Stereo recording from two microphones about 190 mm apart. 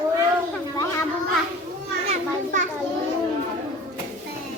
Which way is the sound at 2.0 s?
40° right (ahead or behind).